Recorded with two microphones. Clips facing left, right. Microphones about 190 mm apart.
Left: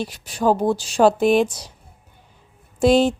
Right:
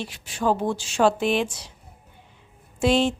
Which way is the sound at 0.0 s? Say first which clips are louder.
Left 5 dB; 40° left (ahead or behind).